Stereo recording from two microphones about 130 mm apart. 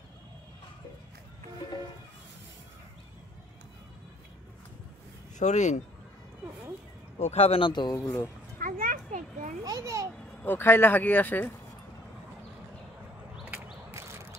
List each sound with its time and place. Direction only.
5.4 s speech: 65° left (ahead or behind)
7.2 s speech: 50° left (ahead or behind); by 8.0 s 35° left (ahead or behind)
8.0 s speech: 15° left (ahead or behind)
8.5 s a sound: 90° right
9.7 s a child's voice: 25° right (ahead or behind)
10.4 s speech: 15° left (ahead or behind)
13.9 s a sound: 20° right (ahead or behind)